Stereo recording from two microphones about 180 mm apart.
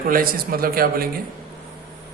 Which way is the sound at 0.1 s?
55° right (ahead or behind).